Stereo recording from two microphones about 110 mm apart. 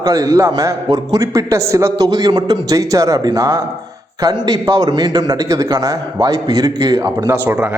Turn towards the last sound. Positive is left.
turn(degrees=-20)  # may be behind; listen again after turning